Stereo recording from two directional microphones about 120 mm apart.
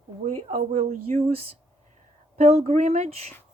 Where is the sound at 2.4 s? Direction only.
65° right (ahead or behind).